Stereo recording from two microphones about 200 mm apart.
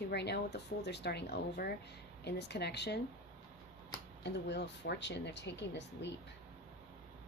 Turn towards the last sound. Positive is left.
turn(degrees=60)  # may be behind; listen again after turning